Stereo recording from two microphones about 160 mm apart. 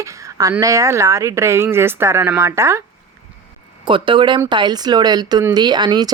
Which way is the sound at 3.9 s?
30° right (ahead or behind).